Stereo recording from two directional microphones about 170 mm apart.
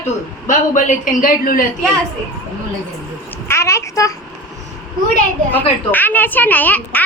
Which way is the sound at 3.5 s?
15° left (ahead or behind).